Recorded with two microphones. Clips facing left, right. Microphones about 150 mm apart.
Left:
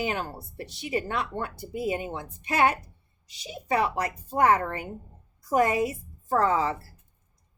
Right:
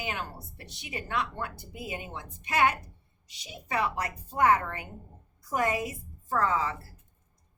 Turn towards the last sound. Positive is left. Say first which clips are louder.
# left 4 dB
turn(degrees=30)  # may be behind; listen again after turning